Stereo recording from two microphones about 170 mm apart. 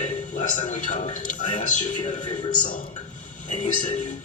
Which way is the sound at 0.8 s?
45° left (ahead or behind).